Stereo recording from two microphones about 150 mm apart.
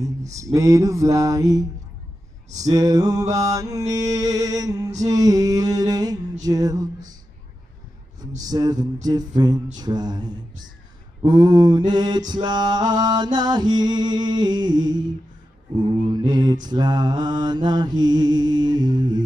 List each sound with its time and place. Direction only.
0.3 s music: 20° right (ahead or behind)
2.7 s music: 25° right (ahead or behind)
8.4 s music: 25° right (ahead or behind)